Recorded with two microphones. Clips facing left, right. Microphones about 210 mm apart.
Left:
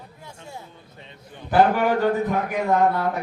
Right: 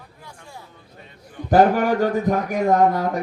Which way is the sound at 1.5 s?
40° right (ahead or behind).